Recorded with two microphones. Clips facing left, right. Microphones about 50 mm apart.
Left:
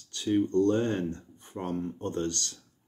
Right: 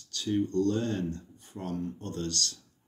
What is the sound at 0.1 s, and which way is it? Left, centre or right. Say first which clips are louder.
Speech: left 3 dB; left.